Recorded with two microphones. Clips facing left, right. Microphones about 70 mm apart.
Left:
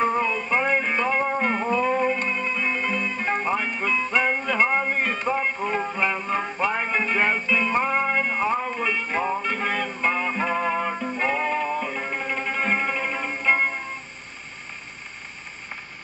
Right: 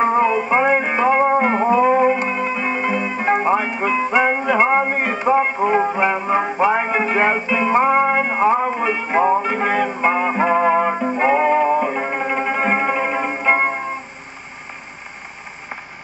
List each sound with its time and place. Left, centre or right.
0.0 s music: right
4.6 s a sound: right
5.6 s music: right
8.8 s music: right